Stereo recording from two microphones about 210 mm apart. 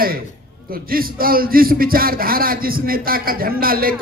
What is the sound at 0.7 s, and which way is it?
A man's voice, 45° right (ahead or behind).